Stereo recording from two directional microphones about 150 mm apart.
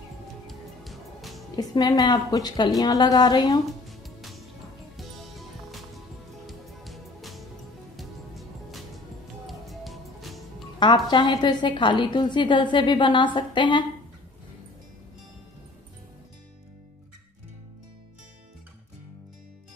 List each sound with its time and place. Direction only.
0.5 s music: centre (ahead or behind)
1.6 s a woman's voice: 25° left (ahead or behind)
3.8 s music: centre (ahead or behind)
6.4 s music: centre (ahead or behind)
10.8 s a woman's voice: 30° left (ahead or behind)